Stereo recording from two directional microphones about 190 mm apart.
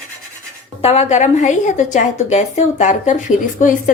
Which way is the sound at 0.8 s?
35° left (ahead or behind).